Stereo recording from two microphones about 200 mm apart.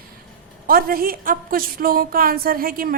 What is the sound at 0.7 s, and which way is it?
A woman's voice, 45° right (ahead or behind).